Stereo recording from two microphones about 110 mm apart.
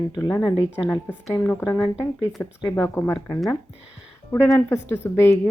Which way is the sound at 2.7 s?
20° left (ahead or behind).